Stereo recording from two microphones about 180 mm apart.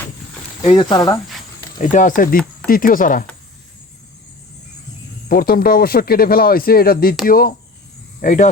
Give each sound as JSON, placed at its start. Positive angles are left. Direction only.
{"t": 0.6, "sound": "speech", "side_deg": 25}
{"t": 1.8, "sound": "speech", "side_deg": 45}
{"t": 5.3, "sound": "a man's voice", "side_deg": 55}